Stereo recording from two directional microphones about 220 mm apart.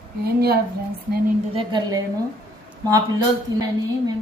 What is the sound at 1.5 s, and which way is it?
Speech, 20° right (ahead or behind).